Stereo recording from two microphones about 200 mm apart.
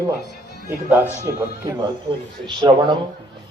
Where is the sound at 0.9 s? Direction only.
10° right (ahead or behind).